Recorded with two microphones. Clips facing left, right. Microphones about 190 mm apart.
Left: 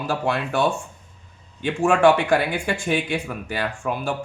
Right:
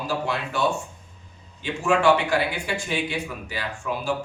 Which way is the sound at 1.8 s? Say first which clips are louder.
Left 3 dB; 50° left (ahead or behind).